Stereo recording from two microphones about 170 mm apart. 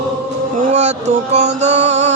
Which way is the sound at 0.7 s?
40° right (ahead or behind).